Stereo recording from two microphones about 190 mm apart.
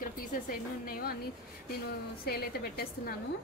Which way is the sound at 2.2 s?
55° left (ahead or behind).